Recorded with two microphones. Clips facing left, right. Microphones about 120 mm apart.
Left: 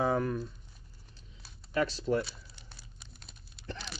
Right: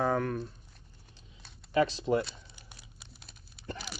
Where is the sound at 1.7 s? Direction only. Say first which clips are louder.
Right 3 dB; 25° right (ahead or behind).